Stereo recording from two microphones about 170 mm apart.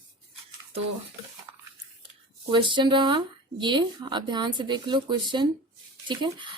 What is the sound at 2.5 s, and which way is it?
Speech, 30° right (ahead or behind).